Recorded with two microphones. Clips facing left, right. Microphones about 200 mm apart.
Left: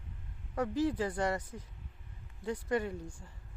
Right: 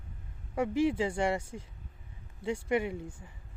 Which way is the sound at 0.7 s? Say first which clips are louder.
Right 4 dB; 25° right (ahead or behind).